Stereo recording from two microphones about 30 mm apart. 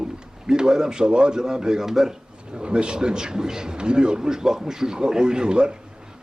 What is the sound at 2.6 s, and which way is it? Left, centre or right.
Speech, right.